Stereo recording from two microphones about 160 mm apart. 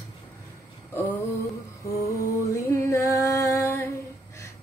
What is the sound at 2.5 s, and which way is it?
Music, 20° left (ahead or behind).